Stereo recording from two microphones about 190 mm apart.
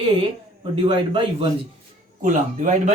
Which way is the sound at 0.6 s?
25° right (ahead or behind).